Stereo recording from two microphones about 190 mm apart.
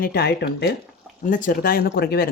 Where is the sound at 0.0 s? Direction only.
55° left (ahead or behind).